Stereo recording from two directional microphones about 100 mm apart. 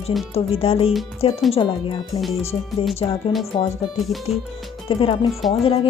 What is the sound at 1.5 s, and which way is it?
Speech, 60° left (ahead or behind).